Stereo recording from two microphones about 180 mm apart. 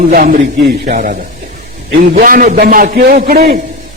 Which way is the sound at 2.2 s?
50° right (ahead or behind).